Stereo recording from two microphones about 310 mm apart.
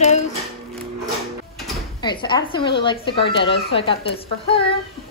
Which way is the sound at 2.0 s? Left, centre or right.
Centre.